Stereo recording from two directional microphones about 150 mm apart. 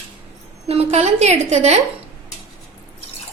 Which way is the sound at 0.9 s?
45° right (ahead or behind).